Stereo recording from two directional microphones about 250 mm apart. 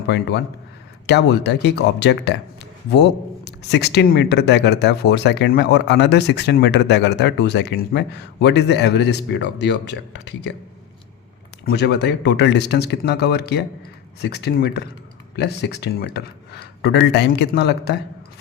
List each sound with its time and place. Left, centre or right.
0.1 s speech: left
11.6 s speech: left